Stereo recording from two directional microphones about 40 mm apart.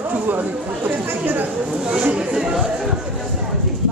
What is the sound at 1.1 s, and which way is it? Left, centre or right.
Chatter, right.